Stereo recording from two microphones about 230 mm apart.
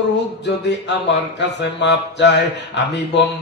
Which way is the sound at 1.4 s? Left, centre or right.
Left.